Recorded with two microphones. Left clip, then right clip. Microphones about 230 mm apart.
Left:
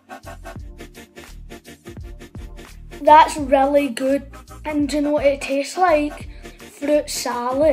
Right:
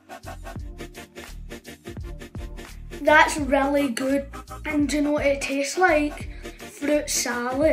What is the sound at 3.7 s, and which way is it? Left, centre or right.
Speech, centre.